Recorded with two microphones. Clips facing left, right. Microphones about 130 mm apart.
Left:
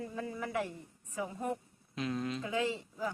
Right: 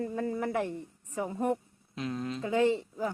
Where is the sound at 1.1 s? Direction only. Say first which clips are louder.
Right 6 dB; 30° right (ahead or behind).